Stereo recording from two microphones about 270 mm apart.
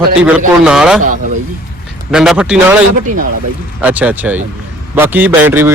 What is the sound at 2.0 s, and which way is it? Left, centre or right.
Speech, centre.